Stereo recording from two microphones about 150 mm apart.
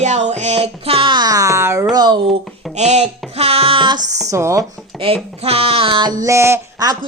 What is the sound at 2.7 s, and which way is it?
Speech, 50° right (ahead or behind).